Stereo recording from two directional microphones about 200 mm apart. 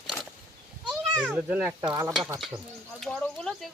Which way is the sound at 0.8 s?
Centre (ahead or behind).